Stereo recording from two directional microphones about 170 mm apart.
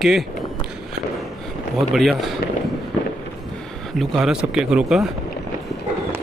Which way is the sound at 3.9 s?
Centre (ahead or behind).